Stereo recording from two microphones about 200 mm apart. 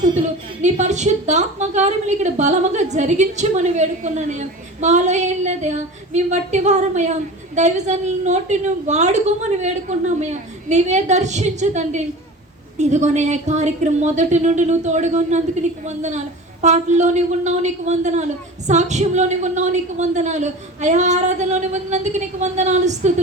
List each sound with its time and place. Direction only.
0.6 s a woman's voice: 35° right (ahead or behind)